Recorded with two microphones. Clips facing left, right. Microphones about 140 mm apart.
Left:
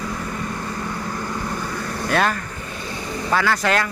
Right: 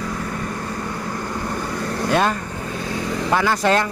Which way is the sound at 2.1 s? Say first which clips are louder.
Right 1 dB; 20° right (ahead or behind).